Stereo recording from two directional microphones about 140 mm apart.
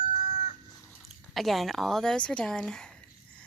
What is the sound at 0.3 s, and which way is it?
Chicken, 55° left (ahead or behind).